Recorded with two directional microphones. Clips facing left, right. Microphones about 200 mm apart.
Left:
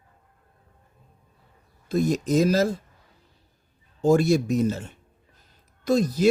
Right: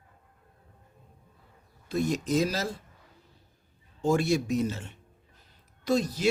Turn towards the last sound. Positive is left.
turn(degrees=45)  # may be behind; listen again after turning